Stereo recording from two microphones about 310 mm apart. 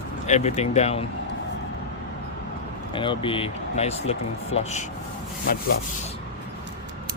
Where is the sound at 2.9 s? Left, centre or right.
Centre.